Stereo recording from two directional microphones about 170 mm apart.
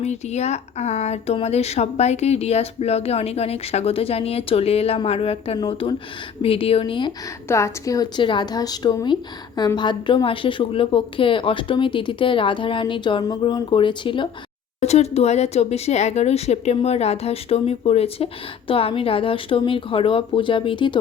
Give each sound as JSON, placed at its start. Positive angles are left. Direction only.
{"t": 0.0, "sound": "a woman's voice", "side_deg": 40}
{"t": 7.4, "sound": "a woman's voice", "side_deg": 15}
{"t": 14.8, "sound": "speech", "side_deg": 40}